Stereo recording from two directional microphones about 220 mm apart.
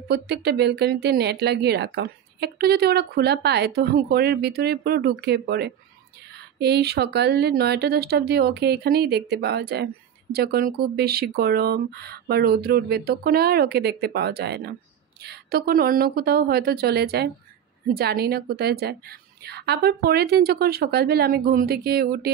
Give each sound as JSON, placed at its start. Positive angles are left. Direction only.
{"t": 0.1, "sound": "speech", "side_deg": -50}